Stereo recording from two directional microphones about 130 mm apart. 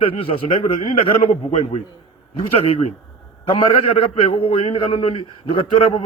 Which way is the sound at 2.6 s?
50° left (ahead or behind).